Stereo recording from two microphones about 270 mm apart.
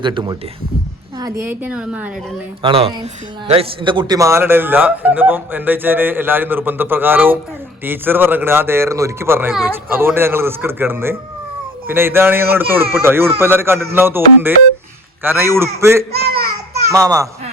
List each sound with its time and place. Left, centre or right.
0.0 s speech: centre
2.6 s speech: centre
15.2 s speech: centre
16.1 s a sound: right
16.9 s speech: centre